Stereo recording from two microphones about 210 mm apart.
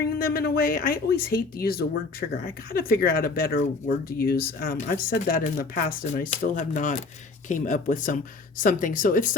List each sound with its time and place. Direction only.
0.2 s speech: 45° left (ahead or behind)